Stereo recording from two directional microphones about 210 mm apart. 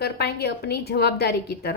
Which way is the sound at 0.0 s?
50° left (ahead or behind).